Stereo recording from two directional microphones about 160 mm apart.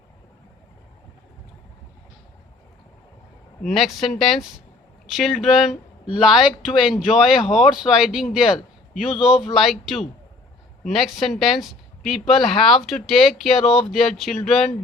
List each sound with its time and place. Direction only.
3.6 s speech: centre (ahead or behind)